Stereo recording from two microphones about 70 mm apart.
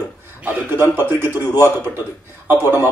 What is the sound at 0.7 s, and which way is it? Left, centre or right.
Speech, right.